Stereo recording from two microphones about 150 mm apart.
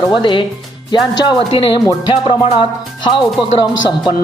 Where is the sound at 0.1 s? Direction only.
35° left (ahead or behind).